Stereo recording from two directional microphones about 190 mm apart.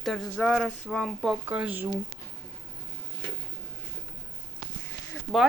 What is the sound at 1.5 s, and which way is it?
Speech, 10° right (ahead or behind).